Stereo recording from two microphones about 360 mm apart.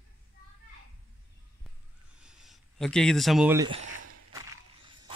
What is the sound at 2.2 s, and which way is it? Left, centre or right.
Speech, centre.